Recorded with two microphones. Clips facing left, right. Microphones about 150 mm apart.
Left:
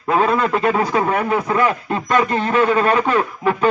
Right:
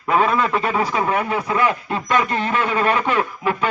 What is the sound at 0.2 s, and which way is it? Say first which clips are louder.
A man's voice: left 3 dB; 40° left (ahead or behind).